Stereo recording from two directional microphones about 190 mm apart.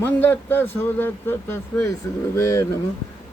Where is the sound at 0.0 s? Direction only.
10° left (ahead or behind).